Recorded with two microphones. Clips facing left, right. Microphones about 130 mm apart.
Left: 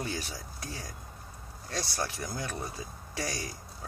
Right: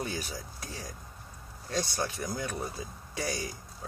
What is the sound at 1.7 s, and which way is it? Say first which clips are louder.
Speech: right 2 dB; 20° right (ahead or behind).